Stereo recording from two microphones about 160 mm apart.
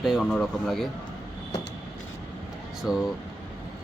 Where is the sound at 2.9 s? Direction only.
5° right (ahead or behind).